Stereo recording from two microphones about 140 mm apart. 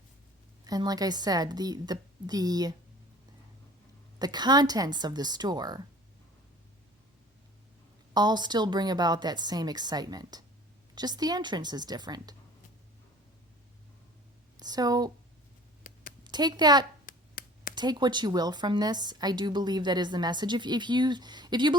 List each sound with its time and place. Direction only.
0.6 s a woman's voice: 30° right (ahead or behind)
4.2 s a woman's voice: 30° right (ahead or behind)
8.1 s a woman's voice: 30° right (ahead or behind)
14.6 s a woman's voice: 30° right (ahead or behind)
15.9 s a sound: 75° left (ahead or behind)
16.2 s a woman's voice: 30° right (ahead or behind)
17.1 s a sound: 85° left
17.7 s a woman's voice: 30° right (ahead or behind)